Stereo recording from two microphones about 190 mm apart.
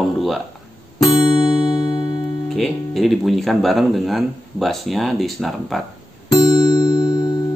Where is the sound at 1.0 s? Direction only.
20° left (ahead or behind).